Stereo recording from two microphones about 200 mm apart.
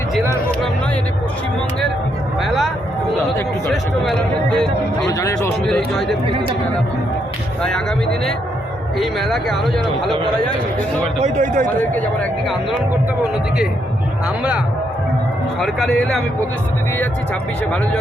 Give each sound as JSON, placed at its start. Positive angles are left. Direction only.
{"t": 5.0, "sound": "speech", "side_deg": 15}
{"t": 5.6, "sound": "speech", "side_deg": 5}
{"t": 7.6, "sound": "speech", "side_deg": 5}
{"t": 11.2, "sound": "speech", "side_deg": -35}
{"t": 15.6, "sound": "speech", "side_deg": 0}